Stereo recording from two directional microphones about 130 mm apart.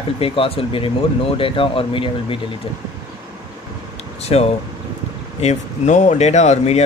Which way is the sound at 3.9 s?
55° left (ahead or behind).